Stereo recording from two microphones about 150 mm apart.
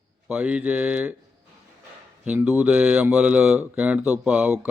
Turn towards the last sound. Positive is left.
turn(degrees=-10)  # may be behind; listen again after turning